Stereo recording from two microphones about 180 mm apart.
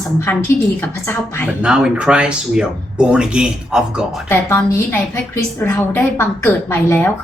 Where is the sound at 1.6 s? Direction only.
5° right (ahead or behind).